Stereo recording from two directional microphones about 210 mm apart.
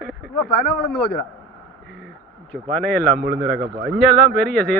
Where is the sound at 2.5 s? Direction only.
5° left (ahead or behind).